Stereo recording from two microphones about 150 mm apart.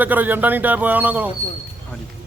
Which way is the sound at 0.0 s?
10° right (ahead or behind).